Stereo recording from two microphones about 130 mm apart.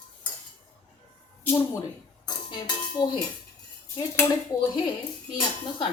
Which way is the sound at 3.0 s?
30° left (ahead or behind).